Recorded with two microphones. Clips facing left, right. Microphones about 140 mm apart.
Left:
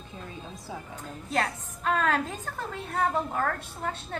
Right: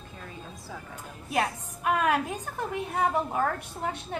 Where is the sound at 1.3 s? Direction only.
15° right (ahead or behind).